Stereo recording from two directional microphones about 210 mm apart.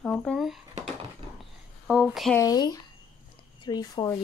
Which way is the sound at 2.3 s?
15° left (ahead or behind).